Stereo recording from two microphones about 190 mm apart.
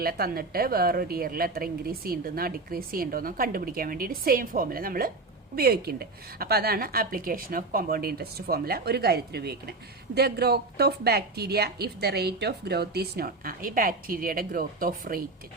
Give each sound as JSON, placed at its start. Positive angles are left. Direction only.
{"t": 0.0, "sound": "a woman's voice", "side_deg": -50}